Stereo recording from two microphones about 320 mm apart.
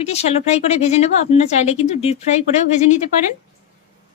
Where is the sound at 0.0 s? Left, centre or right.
Centre.